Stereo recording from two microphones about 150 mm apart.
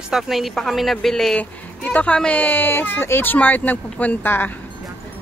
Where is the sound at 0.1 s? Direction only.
Centre (ahead or behind).